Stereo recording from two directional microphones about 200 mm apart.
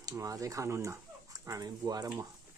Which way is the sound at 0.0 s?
15° right (ahead or behind).